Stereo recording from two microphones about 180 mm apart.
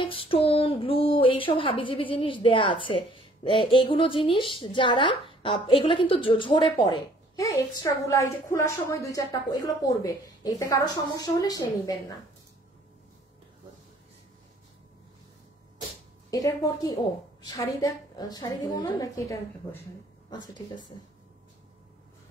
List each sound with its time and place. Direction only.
0.0 s a woman's voice: 30° left (ahead or behind)
16.3 s a woman's voice: 20° left (ahead or behind)